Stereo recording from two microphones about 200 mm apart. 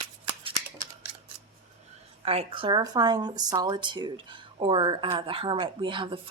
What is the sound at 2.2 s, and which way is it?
A woman's voice, 30° right (ahead or behind).